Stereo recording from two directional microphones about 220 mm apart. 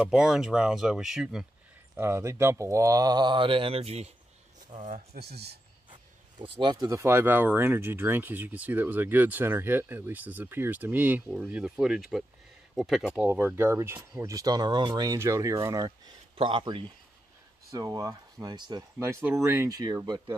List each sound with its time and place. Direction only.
0.1 s speech: 5° right (ahead or behind); by 5.2 s 35° right (ahead or behind)
5.2 s speech: 45° right (ahead or behind)
5.9 s speech: 25° right (ahead or behind)